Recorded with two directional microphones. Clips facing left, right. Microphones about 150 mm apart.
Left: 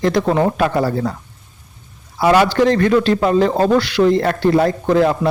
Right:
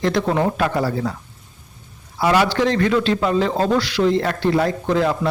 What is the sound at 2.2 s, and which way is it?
Speech, 50° left (ahead or behind).